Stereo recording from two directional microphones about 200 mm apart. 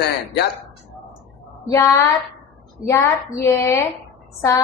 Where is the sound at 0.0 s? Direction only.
55° left (ahead or behind).